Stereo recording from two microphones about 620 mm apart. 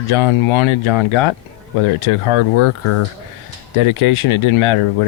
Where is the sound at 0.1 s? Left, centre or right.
Left.